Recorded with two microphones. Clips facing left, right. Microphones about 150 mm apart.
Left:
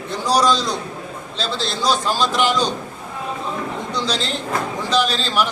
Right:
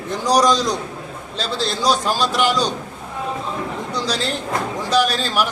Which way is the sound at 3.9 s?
10° right (ahead or behind).